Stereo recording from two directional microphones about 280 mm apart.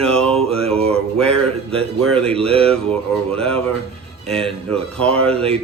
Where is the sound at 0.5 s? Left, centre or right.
Right.